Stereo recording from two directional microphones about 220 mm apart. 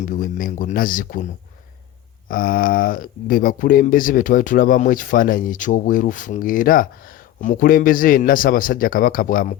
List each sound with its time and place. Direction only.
0.0 s speech: 35° left (ahead or behind)
2.3 s speech: 40° left (ahead or behind)